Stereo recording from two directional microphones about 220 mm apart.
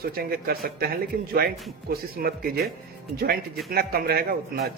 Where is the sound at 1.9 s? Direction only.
45° right (ahead or behind).